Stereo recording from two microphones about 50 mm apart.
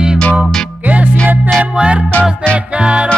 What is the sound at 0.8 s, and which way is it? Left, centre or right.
Music, right.